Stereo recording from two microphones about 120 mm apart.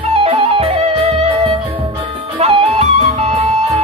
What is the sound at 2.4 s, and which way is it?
Music, 55° right (ahead or behind).